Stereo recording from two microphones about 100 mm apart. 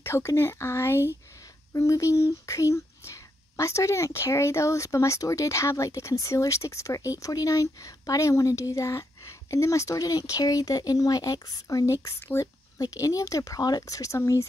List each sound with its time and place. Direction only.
0.0 s speech: 25° left (ahead or behind)